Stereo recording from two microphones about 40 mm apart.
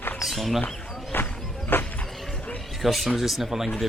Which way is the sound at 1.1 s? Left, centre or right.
Left.